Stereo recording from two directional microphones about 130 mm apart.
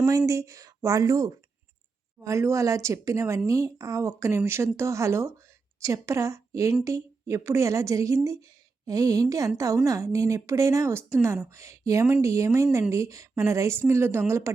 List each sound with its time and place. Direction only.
0.0 s a woman's voice: 25° right (ahead or behind)